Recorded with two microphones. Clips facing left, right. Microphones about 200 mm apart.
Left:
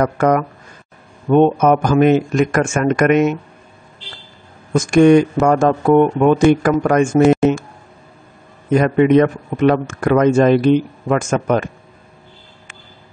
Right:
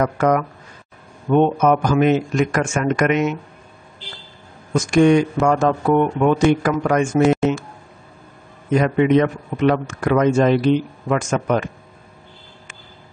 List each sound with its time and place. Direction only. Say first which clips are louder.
0.0 s speech: left 2 dB; 45° left (ahead or behind)
4.7 s speech: left 4 dB; 50° left (ahead or behind)
8.7 s speech: left 4 dB; 50° left (ahead or behind)